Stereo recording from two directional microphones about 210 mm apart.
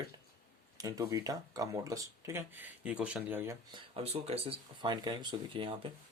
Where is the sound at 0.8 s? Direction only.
15° right (ahead or behind).